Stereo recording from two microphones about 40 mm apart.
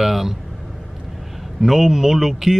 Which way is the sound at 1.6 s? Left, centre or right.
Centre.